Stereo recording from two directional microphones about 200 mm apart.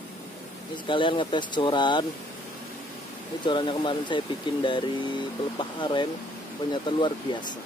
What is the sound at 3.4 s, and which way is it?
Speech, 25° left (ahead or behind).